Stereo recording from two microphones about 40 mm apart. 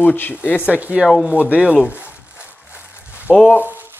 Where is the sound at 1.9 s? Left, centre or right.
Right.